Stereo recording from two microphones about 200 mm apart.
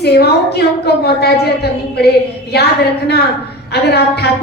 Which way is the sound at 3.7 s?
55° left (ahead or behind).